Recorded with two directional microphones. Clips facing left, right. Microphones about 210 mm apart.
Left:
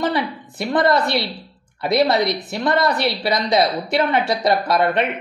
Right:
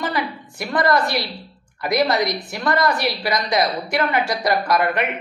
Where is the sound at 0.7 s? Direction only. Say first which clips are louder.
Left 2 dB; 20° left (ahead or behind).